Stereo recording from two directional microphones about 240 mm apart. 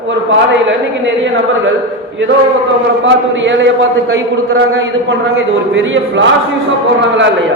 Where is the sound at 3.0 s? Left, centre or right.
Right.